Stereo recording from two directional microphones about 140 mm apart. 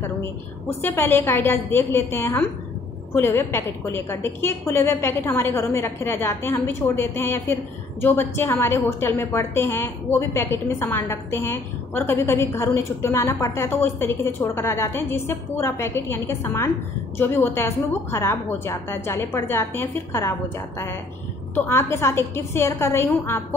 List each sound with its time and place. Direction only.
0.8 s a woman's voice: 15° left (ahead or behind)
21.5 s a woman's voice: 20° left (ahead or behind)